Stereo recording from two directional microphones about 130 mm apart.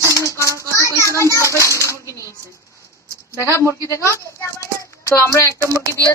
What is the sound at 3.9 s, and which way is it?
A woman's voice, 20° left (ahead or behind).